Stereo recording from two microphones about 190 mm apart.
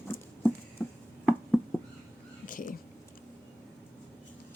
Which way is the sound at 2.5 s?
45° left (ahead or behind).